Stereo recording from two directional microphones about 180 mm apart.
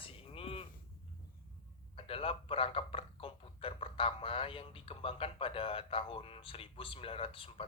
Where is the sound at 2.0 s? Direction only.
30° left (ahead or behind).